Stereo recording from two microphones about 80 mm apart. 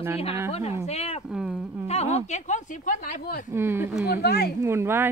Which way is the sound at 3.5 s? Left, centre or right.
Right.